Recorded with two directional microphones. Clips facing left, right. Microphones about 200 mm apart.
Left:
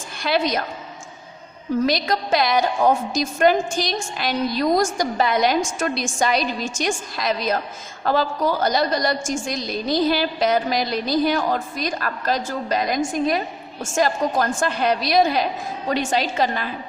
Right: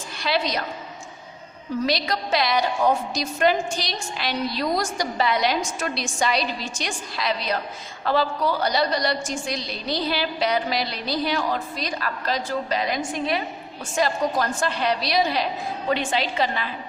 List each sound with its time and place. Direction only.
0.2 s a woman's voice: 50° left (ahead or behind)
1.9 s a woman's voice: 45° left (ahead or behind)